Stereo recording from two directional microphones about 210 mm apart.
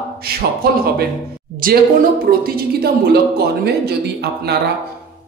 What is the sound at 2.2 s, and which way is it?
A man's voice, 45° right (ahead or behind).